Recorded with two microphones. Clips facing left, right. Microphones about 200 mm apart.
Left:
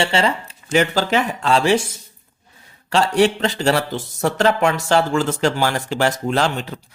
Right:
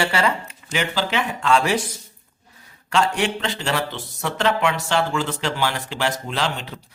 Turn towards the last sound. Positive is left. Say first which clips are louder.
# left 6 dB
turn(degrees=45)  # may be behind; listen again after turning